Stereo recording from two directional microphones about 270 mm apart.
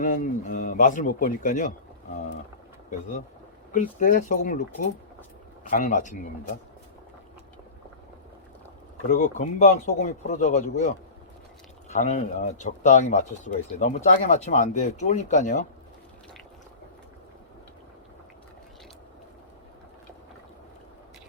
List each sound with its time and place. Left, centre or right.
0.0 s speech: left
3.7 s speech: left
5.7 s speech: left
9.0 s speech: left
11.9 s speech: left